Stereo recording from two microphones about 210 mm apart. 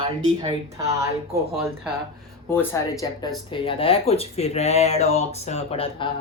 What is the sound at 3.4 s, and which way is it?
Speech, 25° left (ahead or behind).